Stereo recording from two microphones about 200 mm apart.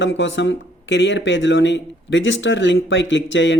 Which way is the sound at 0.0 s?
65° left (ahead or behind).